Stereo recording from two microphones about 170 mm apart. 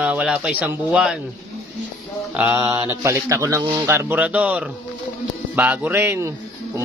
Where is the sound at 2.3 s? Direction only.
10° right (ahead or behind).